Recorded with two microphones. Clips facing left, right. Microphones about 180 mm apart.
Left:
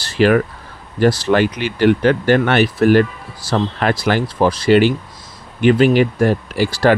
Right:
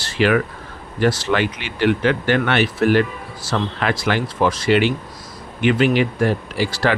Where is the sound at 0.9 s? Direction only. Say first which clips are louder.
Left 4 dB; 40° left (ahead or behind).